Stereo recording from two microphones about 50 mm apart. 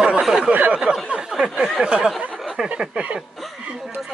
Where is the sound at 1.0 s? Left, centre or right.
Centre.